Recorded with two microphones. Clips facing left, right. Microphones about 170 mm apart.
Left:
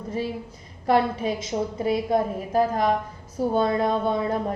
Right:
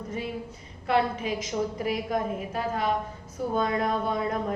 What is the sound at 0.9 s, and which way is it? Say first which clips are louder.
A woman's voice: left 4 dB; 35° left (ahead or behind).